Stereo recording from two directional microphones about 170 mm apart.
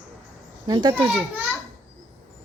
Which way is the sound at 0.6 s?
25° right (ahead or behind).